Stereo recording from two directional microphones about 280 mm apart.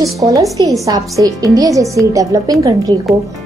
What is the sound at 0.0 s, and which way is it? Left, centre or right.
A woman's voice, centre.